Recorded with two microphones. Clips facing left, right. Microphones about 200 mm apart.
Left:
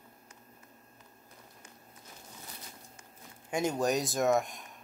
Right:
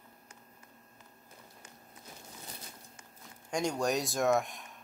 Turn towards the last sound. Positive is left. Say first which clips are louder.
# left 1 dB
turn(degrees=0)  # may be behind; listen again after turning